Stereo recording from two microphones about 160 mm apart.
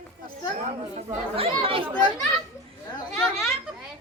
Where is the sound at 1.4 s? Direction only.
35° right (ahead or behind).